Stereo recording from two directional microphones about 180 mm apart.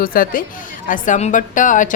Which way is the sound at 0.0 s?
55° left (ahead or behind).